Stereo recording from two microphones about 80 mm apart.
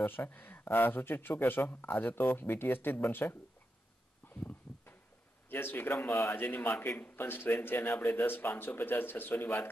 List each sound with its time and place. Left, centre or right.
0.0 s a man's voice: left
4.3 s a sound: left
5.5 s a man's voice: left